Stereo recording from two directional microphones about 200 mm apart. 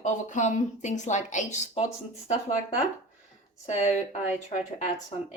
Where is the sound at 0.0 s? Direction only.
35° left (ahead or behind).